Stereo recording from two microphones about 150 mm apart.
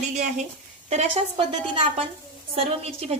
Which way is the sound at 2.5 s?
40° right (ahead or behind).